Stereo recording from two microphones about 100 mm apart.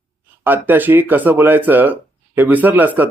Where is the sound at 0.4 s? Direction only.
20° right (ahead or behind).